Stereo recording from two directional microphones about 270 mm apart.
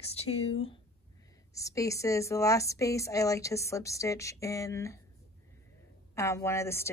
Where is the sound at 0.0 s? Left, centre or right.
Left.